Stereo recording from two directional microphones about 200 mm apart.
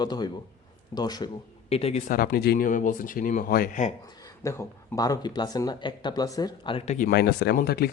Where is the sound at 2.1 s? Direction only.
50° left (ahead or behind).